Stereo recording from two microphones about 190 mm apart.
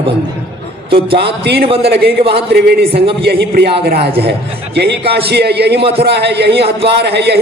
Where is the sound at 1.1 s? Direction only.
60° right (ahead or behind).